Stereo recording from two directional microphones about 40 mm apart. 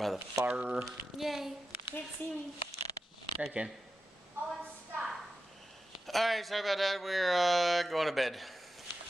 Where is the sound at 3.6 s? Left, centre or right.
Right.